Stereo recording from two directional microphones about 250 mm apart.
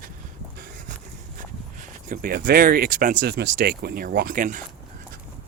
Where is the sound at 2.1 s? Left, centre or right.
Right.